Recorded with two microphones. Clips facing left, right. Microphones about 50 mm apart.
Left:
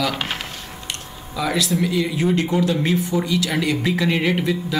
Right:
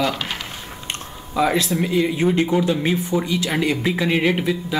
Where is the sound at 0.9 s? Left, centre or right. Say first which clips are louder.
Right 3 dB; right.